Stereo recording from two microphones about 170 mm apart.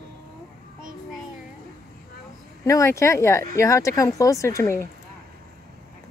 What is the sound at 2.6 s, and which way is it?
Speech, 20° left (ahead or behind).